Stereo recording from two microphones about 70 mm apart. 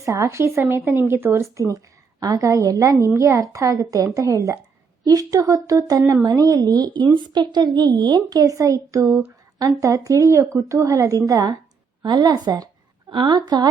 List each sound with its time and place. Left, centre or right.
0.0 s a woman's voice: right
2.2 s a woman's voice: right
12.0 s a woman's voice: right
13.2 s speech: right